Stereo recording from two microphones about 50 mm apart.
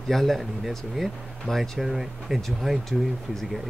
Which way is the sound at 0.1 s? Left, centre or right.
Centre.